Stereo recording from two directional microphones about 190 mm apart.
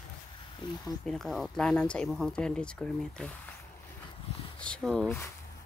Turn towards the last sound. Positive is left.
turn(degrees=5)  # may be behind; listen again after turning